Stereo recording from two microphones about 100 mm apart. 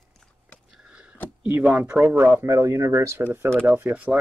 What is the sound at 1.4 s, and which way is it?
Speech, 15° right (ahead or behind).